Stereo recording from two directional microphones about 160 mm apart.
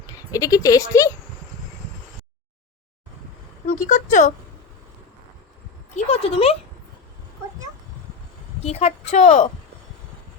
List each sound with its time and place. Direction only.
0.1 s speech: 20° left (ahead or behind)
3.7 s a woman's voice: 50° left (ahead or behind)
6.0 s speech: 40° left (ahead or behind)
8.6 s a woman's voice: 40° left (ahead or behind)